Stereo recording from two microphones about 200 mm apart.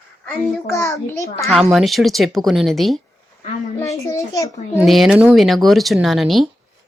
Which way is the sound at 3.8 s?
15° left (ahead or behind).